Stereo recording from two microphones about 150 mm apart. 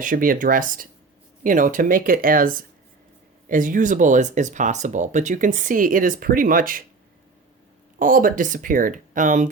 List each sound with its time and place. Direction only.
0.0 s speech: 65° right (ahead or behind)
7.9 s speech: 65° right (ahead or behind)